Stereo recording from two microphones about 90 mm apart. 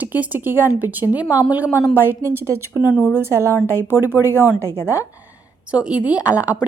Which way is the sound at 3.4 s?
30° left (ahead or behind).